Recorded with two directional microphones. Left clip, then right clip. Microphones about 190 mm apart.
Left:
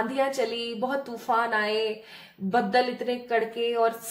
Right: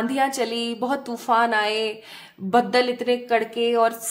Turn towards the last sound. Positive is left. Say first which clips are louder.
# right 5 dB
turn(degrees=-50)  # may be behind; listen again after turning